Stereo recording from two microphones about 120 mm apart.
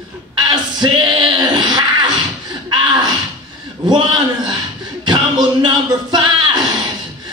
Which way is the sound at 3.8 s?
40° right (ahead or behind).